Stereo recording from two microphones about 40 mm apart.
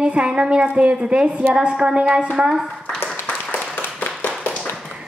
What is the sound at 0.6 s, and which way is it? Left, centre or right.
Speech, right.